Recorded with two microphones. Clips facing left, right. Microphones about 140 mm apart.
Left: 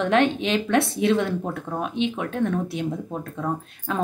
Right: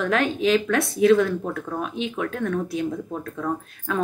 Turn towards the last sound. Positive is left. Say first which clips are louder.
# right 1 dB
turn(degrees=20)  # may be behind; listen again after turning